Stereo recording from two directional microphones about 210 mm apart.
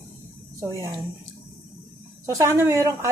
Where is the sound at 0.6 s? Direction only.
15° right (ahead or behind).